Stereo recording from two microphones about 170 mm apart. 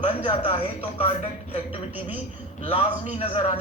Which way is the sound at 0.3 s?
30° left (ahead or behind).